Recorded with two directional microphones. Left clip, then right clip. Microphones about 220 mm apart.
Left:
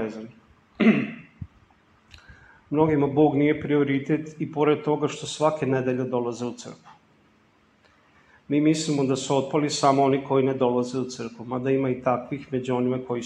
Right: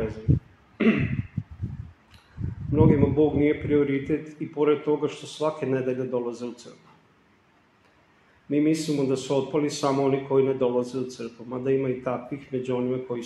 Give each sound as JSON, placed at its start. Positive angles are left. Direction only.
{"t": 0.8, "sound": "a sound", "side_deg": 30}
{"t": 2.7, "sound": "a man's voice", "side_deg": 30}
{"t": 8.5, "sound": "speech", "side_deg": 30}